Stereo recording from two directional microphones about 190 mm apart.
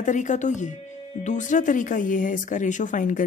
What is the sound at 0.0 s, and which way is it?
Speech, 40° left (ahead or behind).